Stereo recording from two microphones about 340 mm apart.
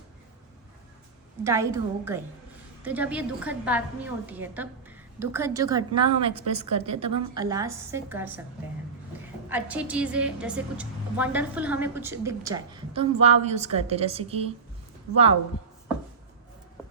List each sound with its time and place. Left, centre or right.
1.5 s a woman's voice: centre
6.5 s a woman's voice: right
6.8 s a woman's voice: centre
9.5 s a woman's voice: centre